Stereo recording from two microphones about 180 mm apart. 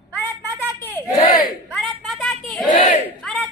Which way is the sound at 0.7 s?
10° left (ahead or behind).